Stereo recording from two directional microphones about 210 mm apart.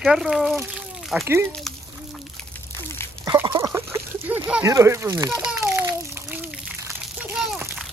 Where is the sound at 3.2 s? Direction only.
20° right (ahead or behind).